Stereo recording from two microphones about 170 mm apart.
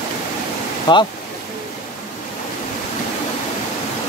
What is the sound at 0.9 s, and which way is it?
Speech, 25° left (ahead or behind).